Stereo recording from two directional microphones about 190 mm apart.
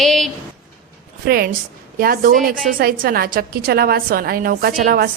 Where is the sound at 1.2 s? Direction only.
55° right (ahead or behind).